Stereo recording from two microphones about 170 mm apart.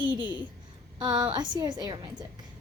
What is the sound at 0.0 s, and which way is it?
A woman's voice, 30° right (ahead or behind).